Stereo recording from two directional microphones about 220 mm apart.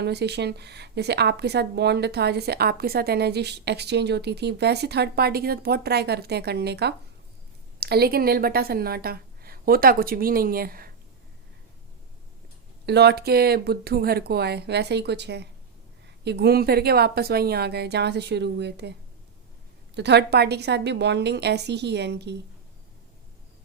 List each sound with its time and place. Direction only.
0.0 s a woman's voice: 50° right (ahead or behind)
12.8 s speech: 50° right (ahead or behind)